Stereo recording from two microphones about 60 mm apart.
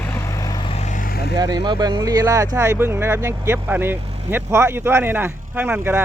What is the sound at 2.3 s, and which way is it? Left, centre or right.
Speech, right.